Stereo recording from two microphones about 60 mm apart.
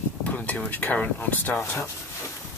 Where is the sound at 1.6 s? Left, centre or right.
Left.